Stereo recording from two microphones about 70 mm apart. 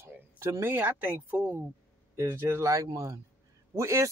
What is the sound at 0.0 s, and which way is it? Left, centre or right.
A woman's voice, right.